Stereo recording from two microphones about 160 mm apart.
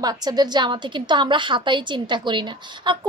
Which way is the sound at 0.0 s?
25° right (ahead or behind).